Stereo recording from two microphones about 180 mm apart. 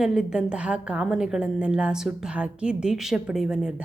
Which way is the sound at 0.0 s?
5° right (ahead or behind).